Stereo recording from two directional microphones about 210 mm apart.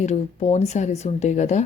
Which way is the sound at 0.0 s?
30° left (ahead or behind).